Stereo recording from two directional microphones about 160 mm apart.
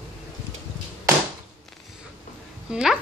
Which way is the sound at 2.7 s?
5° right (ahead or behind).